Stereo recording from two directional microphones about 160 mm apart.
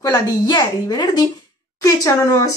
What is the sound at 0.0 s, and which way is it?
Speech, 25° left (ahead or behind).